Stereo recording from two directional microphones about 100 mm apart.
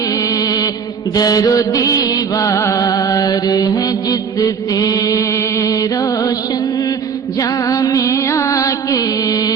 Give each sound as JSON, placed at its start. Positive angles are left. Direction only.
{"t": 0.2, "sound": "a sound", "side_deg": 35}
{"t": 1.1, "sound": "music", "side_deg": 40}
{"t": 7.3, "sound": "music", "side_deg": 35}